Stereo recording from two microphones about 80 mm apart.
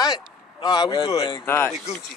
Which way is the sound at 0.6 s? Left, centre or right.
Left.